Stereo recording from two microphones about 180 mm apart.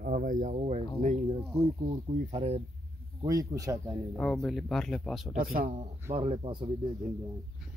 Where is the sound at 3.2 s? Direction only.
20° right (ahead or behind).